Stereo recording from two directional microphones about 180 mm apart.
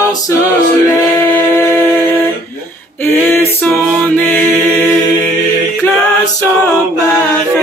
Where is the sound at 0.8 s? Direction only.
15° left (ahead or behind).